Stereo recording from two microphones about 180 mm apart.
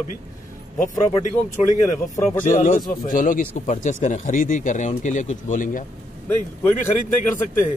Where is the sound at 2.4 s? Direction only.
45° left (ahead or behind).